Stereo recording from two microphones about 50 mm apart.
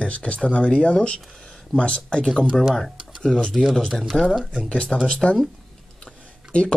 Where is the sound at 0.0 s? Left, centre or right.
Left.